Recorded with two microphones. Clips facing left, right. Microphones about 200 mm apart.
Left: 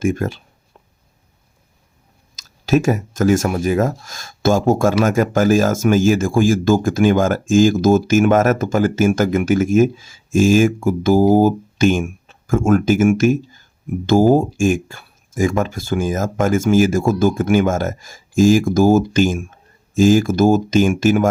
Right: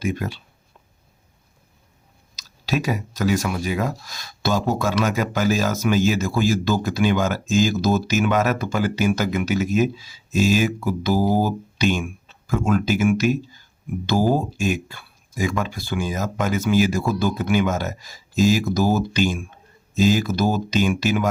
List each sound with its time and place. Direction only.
0.0 s speech: 50° left (ahead or behind)
2.3 s speech: 50° left (ahead or behind)